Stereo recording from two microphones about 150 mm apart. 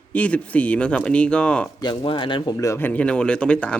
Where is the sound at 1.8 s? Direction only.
35° left (ahead or behind).